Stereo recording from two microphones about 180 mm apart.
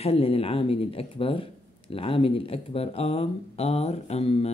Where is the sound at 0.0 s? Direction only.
35° left (ahead or behind).